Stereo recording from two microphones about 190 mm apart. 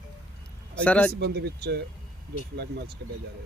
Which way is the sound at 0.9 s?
5° left (ahead or behind).